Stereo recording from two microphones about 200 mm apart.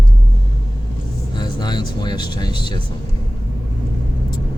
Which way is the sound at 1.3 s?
20° left (ahead or behind).